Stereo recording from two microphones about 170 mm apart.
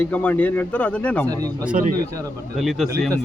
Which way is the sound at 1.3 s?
20° right (ahead or behind).